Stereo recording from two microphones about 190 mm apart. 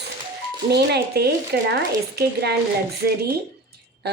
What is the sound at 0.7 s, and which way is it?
Speech, 60° right (ahead or behind).